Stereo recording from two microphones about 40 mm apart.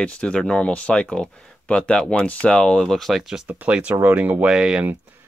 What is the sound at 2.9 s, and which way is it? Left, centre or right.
Speech, centre.